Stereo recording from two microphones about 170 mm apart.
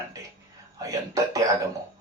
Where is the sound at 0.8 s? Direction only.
20° right (ahead or behind).